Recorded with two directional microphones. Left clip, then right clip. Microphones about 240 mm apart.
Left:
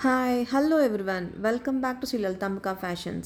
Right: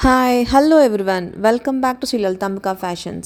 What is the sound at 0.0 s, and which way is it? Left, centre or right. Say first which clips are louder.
A woman's voice: right 11 dB; right.